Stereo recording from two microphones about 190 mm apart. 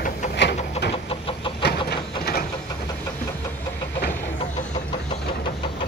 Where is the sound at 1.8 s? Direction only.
55° left (ahead or behind).